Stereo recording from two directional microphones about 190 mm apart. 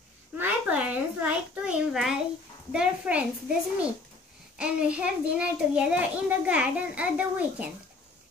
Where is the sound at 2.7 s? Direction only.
5° right (ahead or behind).